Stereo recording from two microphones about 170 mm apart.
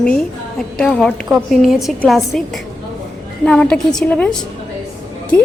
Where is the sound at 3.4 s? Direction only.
5° left (ahead or behind).